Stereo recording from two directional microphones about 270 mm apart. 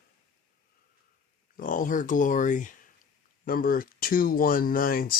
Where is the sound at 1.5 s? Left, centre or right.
Left.